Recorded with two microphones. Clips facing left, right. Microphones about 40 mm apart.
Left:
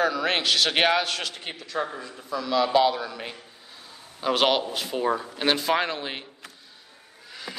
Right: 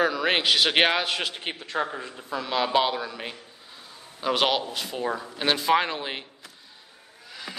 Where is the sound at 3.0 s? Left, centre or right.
Centre.